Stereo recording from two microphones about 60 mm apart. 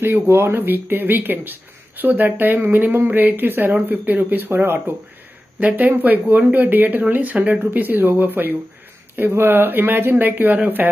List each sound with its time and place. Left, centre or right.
0.0 s speech: right
5.6 s speech: right